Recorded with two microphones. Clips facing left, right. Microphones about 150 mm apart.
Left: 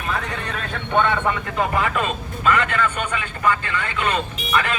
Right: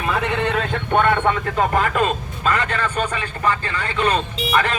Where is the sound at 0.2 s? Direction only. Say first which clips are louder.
Right 8 dB; 75° right (ahead or behind).